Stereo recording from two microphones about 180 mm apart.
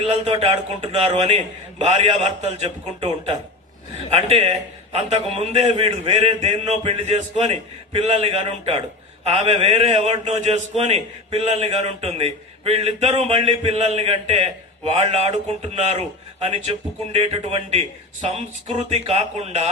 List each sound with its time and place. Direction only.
0.0 s a man's voice: 30° right (ahead or behind)